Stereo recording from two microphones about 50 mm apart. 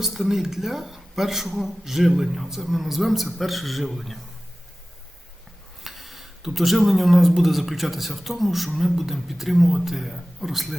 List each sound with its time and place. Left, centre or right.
0.0 s speech: centre
5.8 s speech: centre